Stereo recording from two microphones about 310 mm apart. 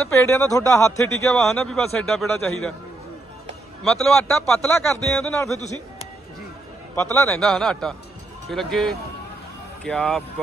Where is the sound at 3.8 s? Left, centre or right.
Centre.